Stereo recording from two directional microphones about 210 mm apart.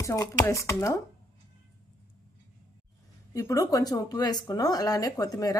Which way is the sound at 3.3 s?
15° left (ahead or behind).